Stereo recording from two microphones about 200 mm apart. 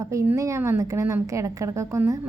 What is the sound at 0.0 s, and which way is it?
A woman's voice, 15° right (ahead or behind).